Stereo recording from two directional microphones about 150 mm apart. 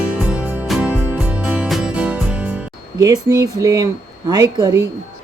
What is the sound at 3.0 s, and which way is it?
Speech, 25° right (ahead or behind).